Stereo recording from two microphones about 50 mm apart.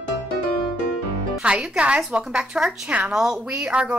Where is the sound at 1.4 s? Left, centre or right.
Right.